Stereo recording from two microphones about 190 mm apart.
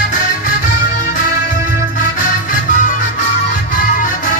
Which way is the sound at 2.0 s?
45° left (ahead or behind).